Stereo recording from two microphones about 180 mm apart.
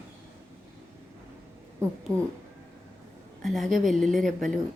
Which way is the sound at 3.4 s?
Centre (ahead or behind).